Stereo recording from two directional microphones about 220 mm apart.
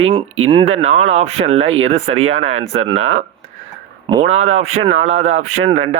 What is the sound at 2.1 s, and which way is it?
Speech, 65° right (ahead or behind).